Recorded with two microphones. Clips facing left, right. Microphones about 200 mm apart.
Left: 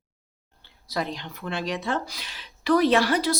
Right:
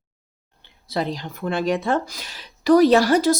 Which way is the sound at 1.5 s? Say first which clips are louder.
Right 7 dB; 50° right (ahead or behind).